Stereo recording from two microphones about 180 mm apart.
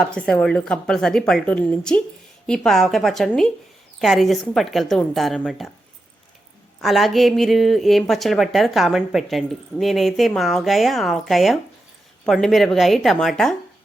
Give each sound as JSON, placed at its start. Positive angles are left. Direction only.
{"t": 0.0, "sound": "a woman's voice", "side_deg": 5}
{"t": 6.8, "sound": "a woman's voice", "side_deg": 0}